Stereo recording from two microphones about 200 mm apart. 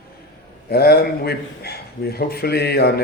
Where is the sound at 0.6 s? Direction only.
50° left (ahead or behind).